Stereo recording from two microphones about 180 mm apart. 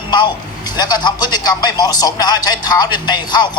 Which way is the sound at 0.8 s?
25° left (ahead or behind).